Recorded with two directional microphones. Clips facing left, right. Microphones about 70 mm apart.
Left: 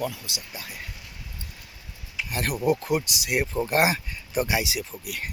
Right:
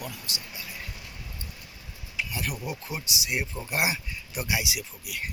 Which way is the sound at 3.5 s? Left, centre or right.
Left.